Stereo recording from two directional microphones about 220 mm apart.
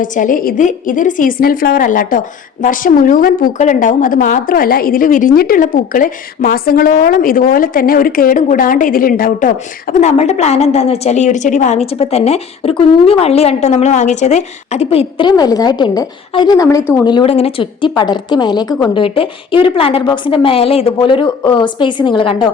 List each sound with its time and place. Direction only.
0.0 s a woman's voice: 35° left (ahead or behind)